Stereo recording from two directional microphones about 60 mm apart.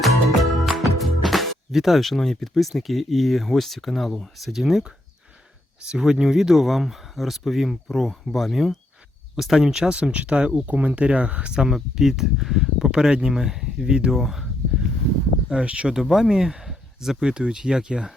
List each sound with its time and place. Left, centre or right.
0.0 s speech: centre
9.9 s speech: centre
11.5 s speech: centre
12.9 s speech: centre
15.4 s speech: centre
16.0 s speech: centre